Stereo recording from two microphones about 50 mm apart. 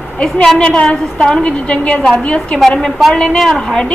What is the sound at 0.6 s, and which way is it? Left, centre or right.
A woman's voice, left.